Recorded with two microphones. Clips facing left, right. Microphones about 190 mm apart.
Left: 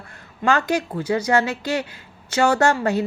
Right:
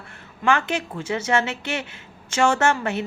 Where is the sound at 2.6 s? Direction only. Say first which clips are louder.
Left 3 dB; 35° left (ahead or behind).